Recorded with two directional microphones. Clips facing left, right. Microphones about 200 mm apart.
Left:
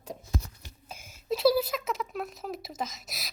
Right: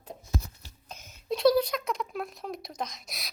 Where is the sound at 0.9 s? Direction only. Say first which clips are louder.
Left 1 dB; 10° left (ahead or behind).